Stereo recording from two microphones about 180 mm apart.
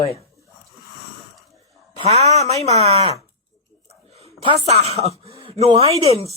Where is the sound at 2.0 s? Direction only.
35° right (ahead or behind).